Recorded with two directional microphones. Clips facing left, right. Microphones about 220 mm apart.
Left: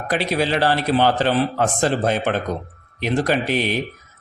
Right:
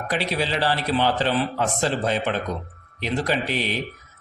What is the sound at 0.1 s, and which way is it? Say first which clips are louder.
A man's voice: left 5 dB; 50° left (ahead or behind).